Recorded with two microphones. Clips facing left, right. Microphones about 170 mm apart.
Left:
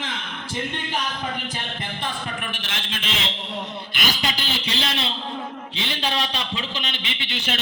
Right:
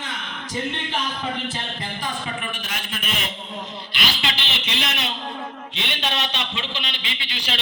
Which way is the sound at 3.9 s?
45° left (ahead or behind).